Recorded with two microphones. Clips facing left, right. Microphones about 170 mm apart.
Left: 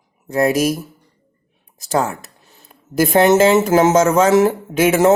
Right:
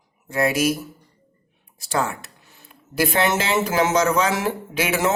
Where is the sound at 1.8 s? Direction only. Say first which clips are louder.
Left 5 dB; 40° left (ahead or behind).